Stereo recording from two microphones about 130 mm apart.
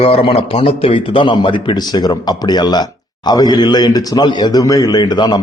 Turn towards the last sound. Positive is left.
turn(degrees=30)  # may be behind; listen again after turning